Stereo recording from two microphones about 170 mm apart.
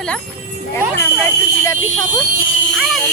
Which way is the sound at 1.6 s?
15° left (ahead or behind).